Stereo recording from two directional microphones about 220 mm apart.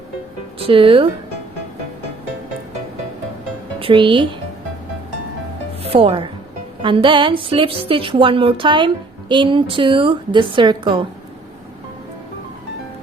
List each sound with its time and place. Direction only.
0.6 s a woman's voice: 25° right (ahead or behind)
3.8 s speech: 25° right (ahead or behind)
5.8 s a woman's voice: 25° right (ahead or behind)